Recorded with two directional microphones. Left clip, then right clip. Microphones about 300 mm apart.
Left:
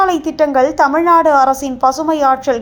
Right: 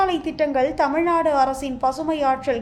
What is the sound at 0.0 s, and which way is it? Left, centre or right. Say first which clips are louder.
A woman's voice: left 8 dB; centre.